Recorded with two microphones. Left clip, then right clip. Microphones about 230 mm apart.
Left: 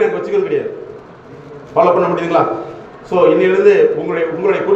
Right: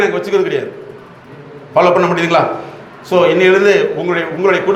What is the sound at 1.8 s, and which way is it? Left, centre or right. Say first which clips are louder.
A man's voice: right 1 dB; right.